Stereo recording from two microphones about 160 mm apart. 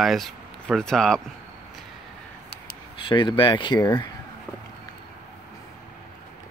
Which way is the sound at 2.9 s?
30° left (ahead or behind).